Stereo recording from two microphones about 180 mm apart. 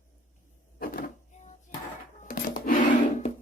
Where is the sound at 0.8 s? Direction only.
50° left (ahead or behind).